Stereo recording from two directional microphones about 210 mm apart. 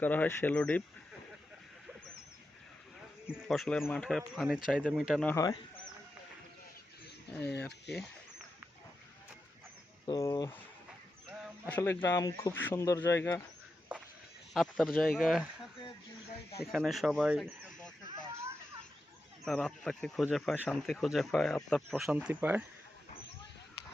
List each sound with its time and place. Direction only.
0.0 s speech: 10° left (ahead or behind)
3.2 s speech: centre (ahead or behind)
10.1 s speech: 20° left (ahead or behind)
11.6 s speech: 10° left (ahead or behind)
14.5 s speech: centre (ahead or behind)
16.7 s speech: centre (ahead or behind)
19.5 s speech: 5° left (ahead or behind)